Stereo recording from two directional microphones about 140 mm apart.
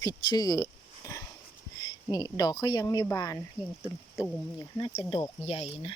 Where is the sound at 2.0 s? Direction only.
25° left (ahead or behind).